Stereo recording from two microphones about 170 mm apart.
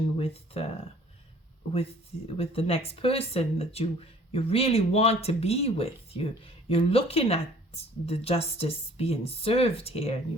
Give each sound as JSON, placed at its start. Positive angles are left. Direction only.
{"t": 0.2, "sound": "speech", "side_deg": 35}
{"t": 1.7, "sound": "speech", "side_deg": 35}